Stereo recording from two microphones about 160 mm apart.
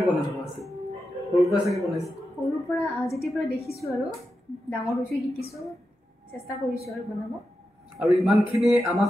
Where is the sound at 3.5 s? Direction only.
40° left (ahead or behind).